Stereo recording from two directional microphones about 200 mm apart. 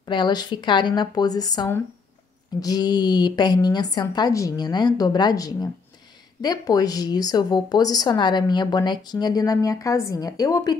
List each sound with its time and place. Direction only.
0.0 s a woman's voice: 20° left (ahead or behind)